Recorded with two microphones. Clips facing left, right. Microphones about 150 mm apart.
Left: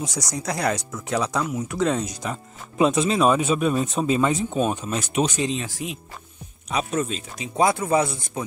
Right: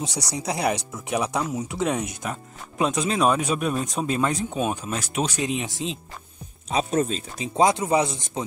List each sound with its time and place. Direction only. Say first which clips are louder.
0.4 s speech: even; 15° right (ahead or behind)
2.8 s speech: left 3 dB; centre (ahead or behind); by 7.6 s 30° right (ahead or behind)
7.6 s speech: even; 20° right (ahead or behind)